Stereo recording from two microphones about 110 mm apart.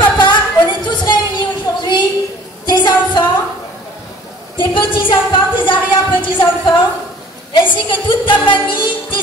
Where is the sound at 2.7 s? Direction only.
40° left (ahead or behind).